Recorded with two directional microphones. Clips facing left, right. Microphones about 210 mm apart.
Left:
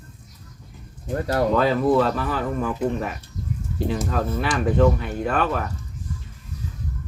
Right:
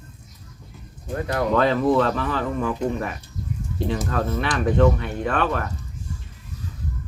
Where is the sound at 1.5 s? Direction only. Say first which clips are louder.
Right 1 dB; 5° left (ahead or behind).